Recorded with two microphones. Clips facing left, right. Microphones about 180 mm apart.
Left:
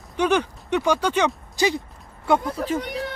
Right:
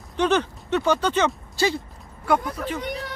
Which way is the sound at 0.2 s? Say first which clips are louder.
Even; 10° left (ahead or behind).